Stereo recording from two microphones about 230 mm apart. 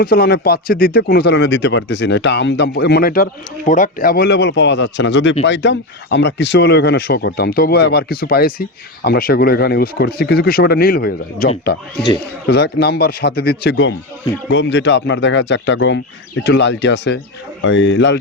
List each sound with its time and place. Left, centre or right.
0.0 s speech: left